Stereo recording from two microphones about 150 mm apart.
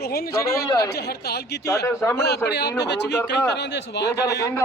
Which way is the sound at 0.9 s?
90° left.